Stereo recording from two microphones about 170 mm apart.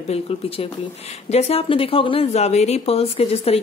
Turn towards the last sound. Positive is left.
turn(degrees=35)  # may be behind; listen again after turning